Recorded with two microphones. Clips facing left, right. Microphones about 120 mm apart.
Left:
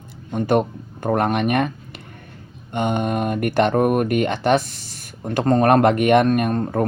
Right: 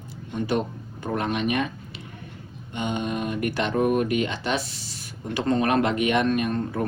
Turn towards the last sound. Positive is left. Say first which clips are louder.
# left 5 dB
turn(degrees=50)  # may be behind; listen again after turning